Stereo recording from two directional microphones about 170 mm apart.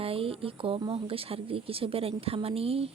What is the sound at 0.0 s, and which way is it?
Speech, 35° right (ahead or behind).